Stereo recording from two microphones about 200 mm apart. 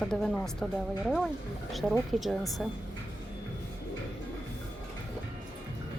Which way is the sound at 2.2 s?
Centre (ahead or behind).